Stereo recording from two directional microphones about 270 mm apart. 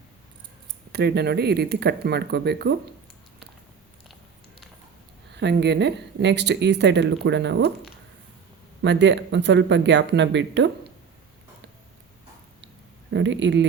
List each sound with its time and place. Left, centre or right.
0.9 s speech: right
5.4 s speech: right
8.8 s speech: right
13.1 s speech: right